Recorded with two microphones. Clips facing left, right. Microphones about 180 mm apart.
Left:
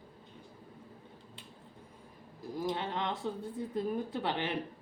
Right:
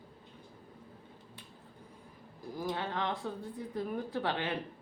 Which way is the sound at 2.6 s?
20° left (ahead or behind).